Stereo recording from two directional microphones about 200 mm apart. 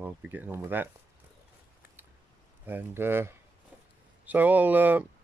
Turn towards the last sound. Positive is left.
turn(degrees=-10)  # may be behind; listen again after turning